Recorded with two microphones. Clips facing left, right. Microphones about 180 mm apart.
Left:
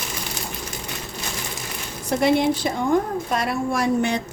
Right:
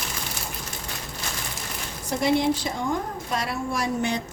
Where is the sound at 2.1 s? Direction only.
65° left (ahead or behind).